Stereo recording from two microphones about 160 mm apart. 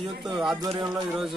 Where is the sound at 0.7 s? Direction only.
30° right (ahead or behind).